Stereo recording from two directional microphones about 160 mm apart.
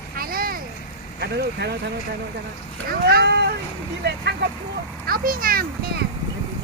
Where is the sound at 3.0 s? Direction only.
80° right.